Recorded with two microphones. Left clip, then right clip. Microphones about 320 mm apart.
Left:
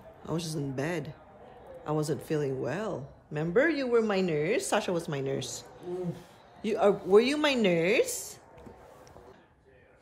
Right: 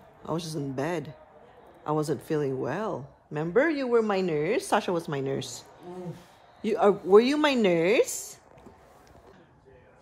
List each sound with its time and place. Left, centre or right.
0.2 s speech: centre